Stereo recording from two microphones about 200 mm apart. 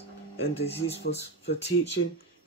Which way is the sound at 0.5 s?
30° left (ahead or behind).